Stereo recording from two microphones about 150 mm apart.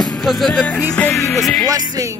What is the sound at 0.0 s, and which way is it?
Speech, 5° left (ahead or behind).